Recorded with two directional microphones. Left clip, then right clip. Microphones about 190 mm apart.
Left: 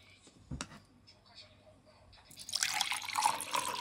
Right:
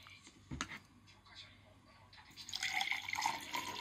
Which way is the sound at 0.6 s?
35° left (ahead or behind).